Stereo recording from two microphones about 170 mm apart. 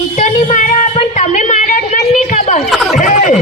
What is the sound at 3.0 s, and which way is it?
Speech, 50° left (ahead or behind).